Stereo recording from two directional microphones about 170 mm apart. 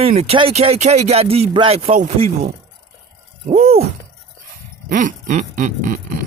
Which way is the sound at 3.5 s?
40° right (ahead or behind).